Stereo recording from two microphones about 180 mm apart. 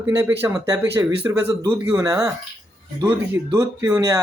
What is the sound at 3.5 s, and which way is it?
Speech, 20° right (ahead or behind).